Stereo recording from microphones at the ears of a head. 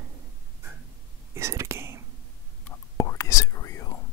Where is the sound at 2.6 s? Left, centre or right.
Left.